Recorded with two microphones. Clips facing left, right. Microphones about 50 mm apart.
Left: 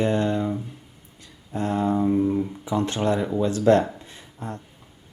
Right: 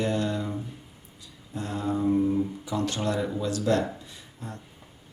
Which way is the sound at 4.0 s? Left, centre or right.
Left.